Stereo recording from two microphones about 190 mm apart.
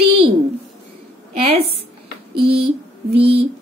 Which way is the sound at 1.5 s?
30° right (ahead or behind).